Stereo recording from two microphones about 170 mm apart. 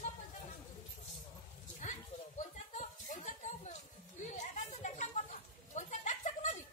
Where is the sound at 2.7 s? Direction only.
45° left (ahead or behind).